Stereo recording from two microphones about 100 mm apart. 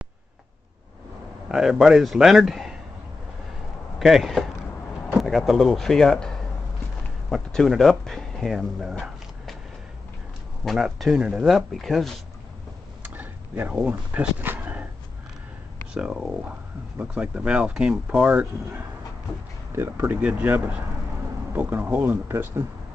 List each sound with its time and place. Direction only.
1.5 s speech: 5° right (ahead or behind)
4.0 s speech: centre (ahead or behind)
10.6 s speech: centre (ahead or behind)
11.1 s speech: 10° right (ahead or behind)
13.0 s dog: 15° right (ahead or behind)
15.9 s speech: 10° right (ahead or behind)
19.7 s speech: 25° right (ahead or behind)